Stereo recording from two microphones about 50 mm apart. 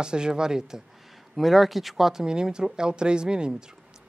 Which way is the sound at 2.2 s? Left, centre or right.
Centre.